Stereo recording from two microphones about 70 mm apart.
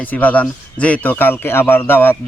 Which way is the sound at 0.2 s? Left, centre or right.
Left.